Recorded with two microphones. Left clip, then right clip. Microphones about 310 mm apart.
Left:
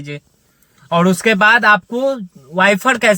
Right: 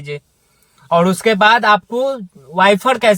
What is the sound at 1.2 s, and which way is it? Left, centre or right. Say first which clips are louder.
Speech: left 2 dB; right.